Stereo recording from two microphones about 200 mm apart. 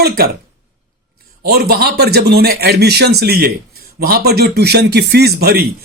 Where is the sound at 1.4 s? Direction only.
50° right (ahead or behind).